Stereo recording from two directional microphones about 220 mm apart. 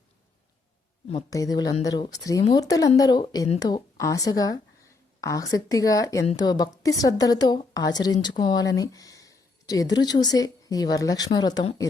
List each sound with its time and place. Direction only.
1.3 s a woman's voice: 15° left (ahead or behind)